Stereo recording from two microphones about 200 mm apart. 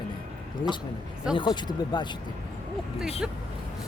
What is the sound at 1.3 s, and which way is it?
Speech, 20° left (ahead or behind).